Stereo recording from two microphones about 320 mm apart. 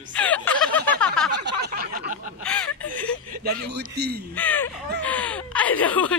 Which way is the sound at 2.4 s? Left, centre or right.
Centre.